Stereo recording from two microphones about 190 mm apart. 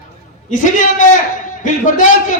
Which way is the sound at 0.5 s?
45° left (ahead or behind).